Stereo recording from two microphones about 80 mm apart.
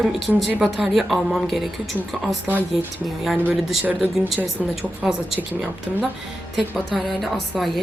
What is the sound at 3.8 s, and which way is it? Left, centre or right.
Speech, right.